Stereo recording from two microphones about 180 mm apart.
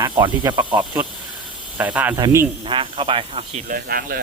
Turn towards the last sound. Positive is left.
turn(degrees=-55)  # may be behind; listen again after turning